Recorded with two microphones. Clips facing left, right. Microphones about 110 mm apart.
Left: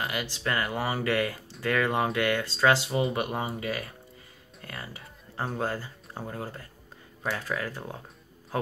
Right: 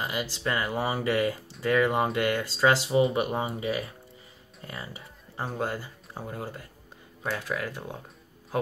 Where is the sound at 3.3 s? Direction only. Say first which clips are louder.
Right 2 dB; 20° right (ahead or behind).